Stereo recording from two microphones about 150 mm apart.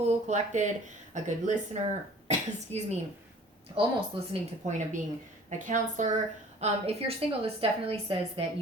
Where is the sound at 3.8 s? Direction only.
35° right (ahead or behind).